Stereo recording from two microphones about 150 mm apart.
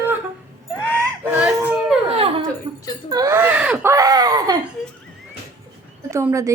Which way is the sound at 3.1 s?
25° right (ahead or behind).